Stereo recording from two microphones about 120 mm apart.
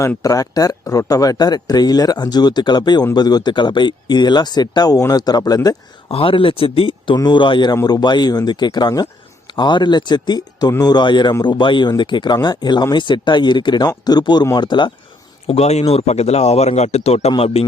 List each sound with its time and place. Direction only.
0.2 s speech: 30° left (ahead or behind)
6.1 s speech: 50° left (ahead or behind)
15.4 s speech: 60° left (ahead or behind)